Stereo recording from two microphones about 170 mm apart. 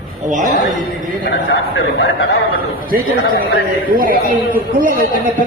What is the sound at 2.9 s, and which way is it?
Speech, 55° right (ahead or behind).